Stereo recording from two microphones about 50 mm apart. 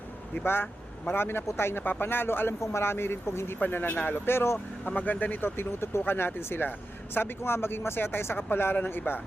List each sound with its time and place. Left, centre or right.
0.4 s speech: left
1.8 s speech: left
3.6 s speech: left
4.3 s speech: left
4.9 s speech: left